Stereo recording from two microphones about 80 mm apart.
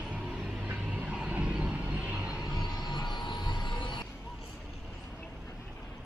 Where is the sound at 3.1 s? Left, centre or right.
Left.